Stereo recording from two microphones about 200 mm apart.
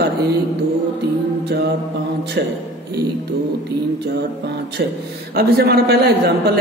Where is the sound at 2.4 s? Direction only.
55° right (ahead or behind).